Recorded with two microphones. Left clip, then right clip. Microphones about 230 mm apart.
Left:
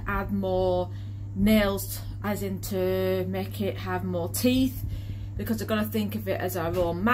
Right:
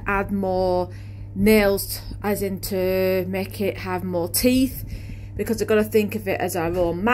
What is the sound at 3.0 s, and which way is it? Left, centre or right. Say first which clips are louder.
Speech: right 5 dB; right.